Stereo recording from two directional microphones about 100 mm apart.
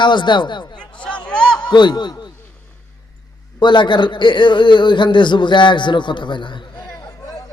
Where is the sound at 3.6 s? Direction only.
50° left (ahead or behind).